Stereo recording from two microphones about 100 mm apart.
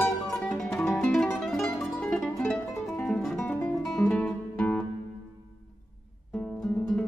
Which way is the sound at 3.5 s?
10° left (ahead or behind).